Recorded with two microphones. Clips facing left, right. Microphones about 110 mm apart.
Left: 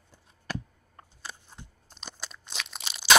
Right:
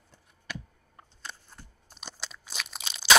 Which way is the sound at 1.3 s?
5° left (ahead or behind).